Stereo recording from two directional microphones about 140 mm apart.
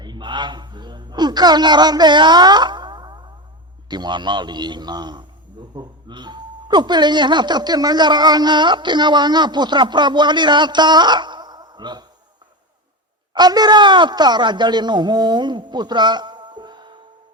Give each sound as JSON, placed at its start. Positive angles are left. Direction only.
{"t": 0.0, "sound": "a sound", "side_deg": -35}
{"t": 3.8, "sound": "speech", "side_deg": -30}
{"t": 13.3, "sound": "speech", "side_deg": -30}